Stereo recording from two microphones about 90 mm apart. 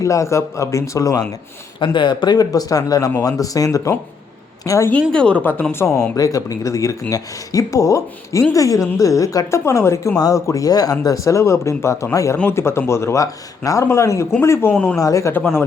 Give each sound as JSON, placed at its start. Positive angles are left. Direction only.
{"t": 0.0, "sound": "a woman's voice", "side_deg": 35}
{"t": 1.8, "sound": "a woman's voice", "side_deg": 65}
{"t": 5.1, "sound": "a woman's voice", "side_deg": 15}
{"t": 6.1, "sound": "a woman's voice", "side_deg": 40}